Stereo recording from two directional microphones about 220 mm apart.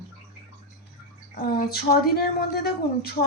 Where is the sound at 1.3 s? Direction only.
45° left (ahead or behind).